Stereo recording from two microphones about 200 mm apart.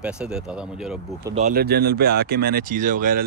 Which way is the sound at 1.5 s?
50° right (ahead or behind).